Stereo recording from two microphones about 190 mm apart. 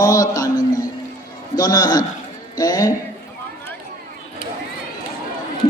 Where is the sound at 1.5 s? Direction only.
20° left (ahead or behind).